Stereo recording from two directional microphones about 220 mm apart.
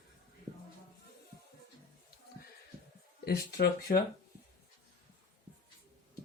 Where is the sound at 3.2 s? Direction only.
45° left (ahead or behind).